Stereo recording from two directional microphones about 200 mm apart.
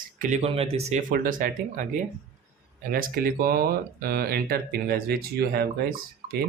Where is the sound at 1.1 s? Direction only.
45° right (ahead or behind).